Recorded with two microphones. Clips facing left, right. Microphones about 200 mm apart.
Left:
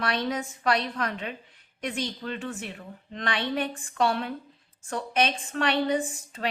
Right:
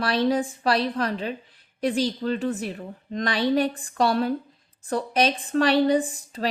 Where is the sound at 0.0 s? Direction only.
35° right (ahead or behind).